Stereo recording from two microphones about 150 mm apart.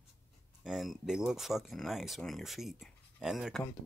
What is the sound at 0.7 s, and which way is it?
Speech, 5° right (ahead or behind).